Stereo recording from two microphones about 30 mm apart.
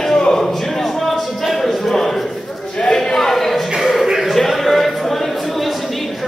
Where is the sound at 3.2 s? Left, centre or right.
Centre.